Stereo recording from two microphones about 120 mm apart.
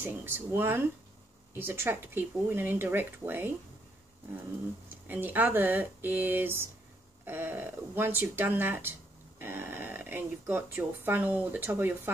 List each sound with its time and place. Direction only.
0.0 s speech: 20° right (ahead or behind)
5.0 s speech: 15° right (ahead or behind)